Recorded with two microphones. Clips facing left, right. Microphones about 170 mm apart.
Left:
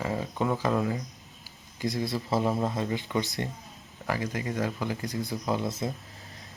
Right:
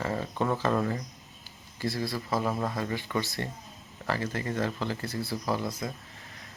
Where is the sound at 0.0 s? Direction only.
10° left (ahead or behind).